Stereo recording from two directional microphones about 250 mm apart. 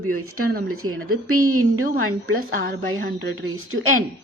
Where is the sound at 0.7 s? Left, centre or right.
Right.